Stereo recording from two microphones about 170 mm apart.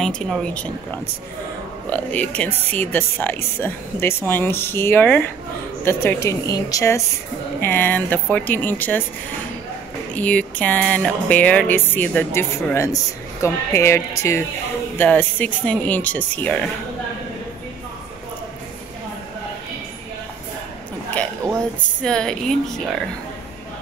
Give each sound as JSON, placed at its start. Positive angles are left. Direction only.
{"t": 0.0, "sound": "speech", "side_deg": 5}
{"t": 1.9, "sound": "music", "side_deg": 10}
{"t": 10.1, "sound": "music", "side_deg": 10}
{"t": 22.0, "sound": "speech", "side_deg": 5}